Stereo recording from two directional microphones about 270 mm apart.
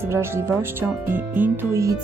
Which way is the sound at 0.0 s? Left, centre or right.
Centre.